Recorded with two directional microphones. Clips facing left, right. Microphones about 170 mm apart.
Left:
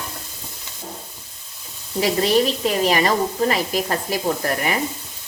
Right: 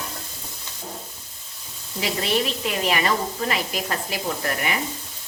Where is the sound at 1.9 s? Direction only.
40° left (ahead or behind).